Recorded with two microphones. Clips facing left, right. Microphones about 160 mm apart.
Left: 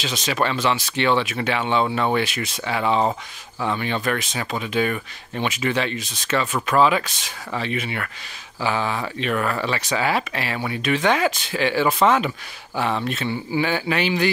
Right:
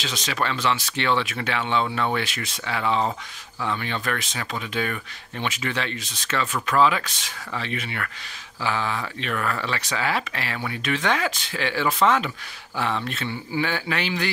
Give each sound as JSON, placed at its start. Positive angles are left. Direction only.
{"t": 0.0, "sound": "speech", "side_deg": 20}